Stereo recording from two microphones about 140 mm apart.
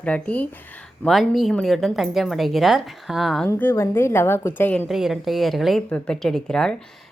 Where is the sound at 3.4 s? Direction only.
15° left (ahead or behind).